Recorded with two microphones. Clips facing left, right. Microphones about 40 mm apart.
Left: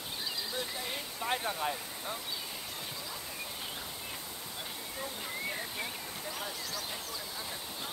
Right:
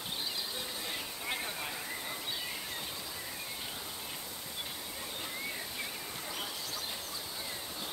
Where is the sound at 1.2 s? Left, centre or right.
Centre.